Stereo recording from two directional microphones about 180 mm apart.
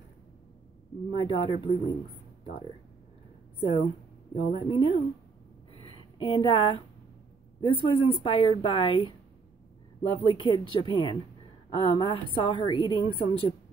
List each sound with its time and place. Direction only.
1.1 s a woman's voice: 30° left (ahead or behind)
4.5 s a woman's voice: 30° left (ahead or behind)
5.7 s a sound: 30° left (ahead or behind)
7.6 s a woman's voice: 25° left (ahead or behind)